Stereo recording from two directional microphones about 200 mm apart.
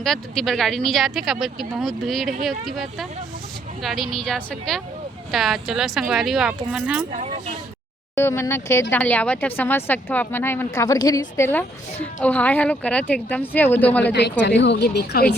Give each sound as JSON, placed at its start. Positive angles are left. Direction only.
{"t": 0.0, "sound": "speech", "side_deg": 0}
{"t": 7.1, "sound": "speech", "side_deg": -35}
{"t": 8.1, "sound": "speech", "side_deg": 10}
{"t": 14.0, "sound": "speech", "side_deg": 55}